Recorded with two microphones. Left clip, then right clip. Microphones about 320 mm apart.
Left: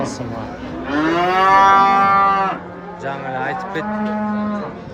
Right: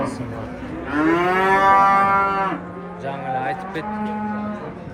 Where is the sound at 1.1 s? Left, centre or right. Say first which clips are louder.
Left 5 dB; left.